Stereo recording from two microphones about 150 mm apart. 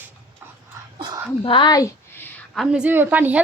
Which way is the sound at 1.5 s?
30° left (ahead or behind).